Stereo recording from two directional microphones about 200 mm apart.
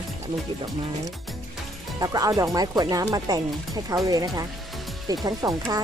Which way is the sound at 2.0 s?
15° right (ahead or behind).